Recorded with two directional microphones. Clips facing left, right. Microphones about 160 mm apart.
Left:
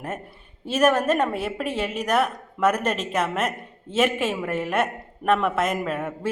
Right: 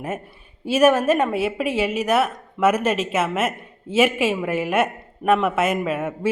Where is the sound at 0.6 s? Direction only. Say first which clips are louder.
Right 4 dB; 5° right (ahead or behind).